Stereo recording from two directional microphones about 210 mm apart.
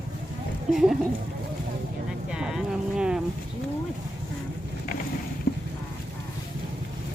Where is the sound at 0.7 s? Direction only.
Centre (ahead or behind).